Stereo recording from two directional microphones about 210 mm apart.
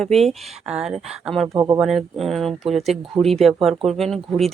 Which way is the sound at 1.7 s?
Centre (ahead or behind).